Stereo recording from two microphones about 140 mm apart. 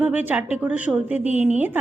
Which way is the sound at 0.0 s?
10° right (ahead or behind).